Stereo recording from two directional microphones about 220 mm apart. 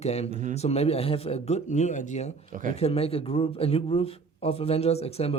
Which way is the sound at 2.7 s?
25° left (ahead or behind).